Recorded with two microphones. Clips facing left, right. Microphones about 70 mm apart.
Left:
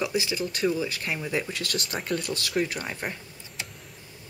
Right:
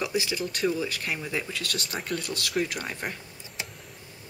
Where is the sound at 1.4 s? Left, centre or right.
Centre.